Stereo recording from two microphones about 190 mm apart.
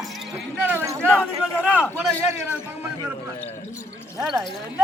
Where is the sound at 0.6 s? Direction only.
15° right (ahead or behind).